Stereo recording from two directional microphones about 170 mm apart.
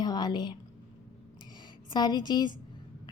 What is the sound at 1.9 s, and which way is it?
Speech, 25° left (ahead or behind).